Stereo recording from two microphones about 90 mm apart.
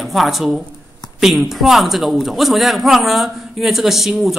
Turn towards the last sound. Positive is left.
turn(degrees=0)  # may be behind; listen again after turning